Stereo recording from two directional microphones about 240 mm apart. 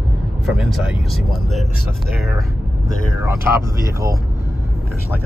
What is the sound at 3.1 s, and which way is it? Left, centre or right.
Speech, centre.